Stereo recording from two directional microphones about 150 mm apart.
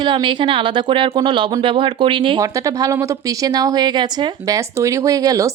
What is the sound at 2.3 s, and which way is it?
Speech, 20° right (ahead or behind).